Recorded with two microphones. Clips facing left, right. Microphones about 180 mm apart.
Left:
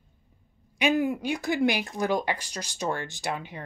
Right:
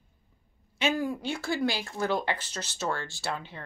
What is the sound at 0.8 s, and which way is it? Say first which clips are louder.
Speech: left 4 dB; 20° left (ahead or behind).